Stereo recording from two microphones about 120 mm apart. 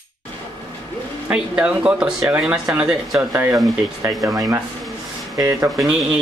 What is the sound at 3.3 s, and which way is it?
Speech, 20° right (ahead or behind).